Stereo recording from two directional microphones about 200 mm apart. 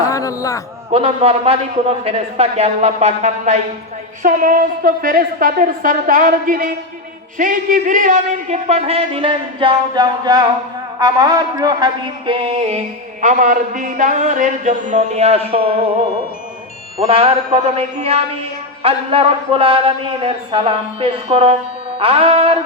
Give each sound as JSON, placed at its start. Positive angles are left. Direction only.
{"t": 0.0, "sound": "a sound", "side_deg": 15}
{"t": 0.9, "sound": "a man's voice", "side_deg": -30}
{"t": 13.2, "sound": "a man's voice", "side_deg": -40}
{"t": 17.0, "sound": "a man's voice", "side_deg": -30}